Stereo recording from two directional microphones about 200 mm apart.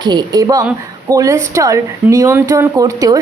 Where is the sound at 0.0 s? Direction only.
20° right (ahead or behind).